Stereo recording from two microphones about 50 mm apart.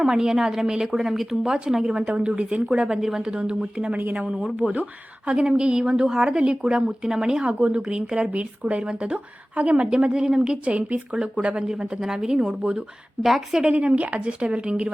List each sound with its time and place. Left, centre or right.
0.0 s a woman's voice: centre
1.7 s a woman's voice: centre
3.3 s speech: centre
3.9 s speech: right
4.2 s a woman's voice: centre
4.5 s a woman's voice: right
9.8 s speech: centre; by 11.2 s right
11.7 s a woman's voice: centre
13.2 s a woman's voice: centre
13.6 s speech: centre